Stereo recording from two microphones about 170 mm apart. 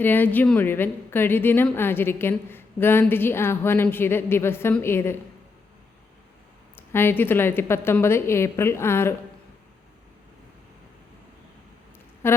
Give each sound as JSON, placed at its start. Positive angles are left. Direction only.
{"t": 0.0, "sound": "a woman's voice", "side_deg": 10}
{"t": 6.7, "sound": "a woman's voice", "side_deg": 15}
{"t": 12.2, "sound": "a sound", "side_deg": 15}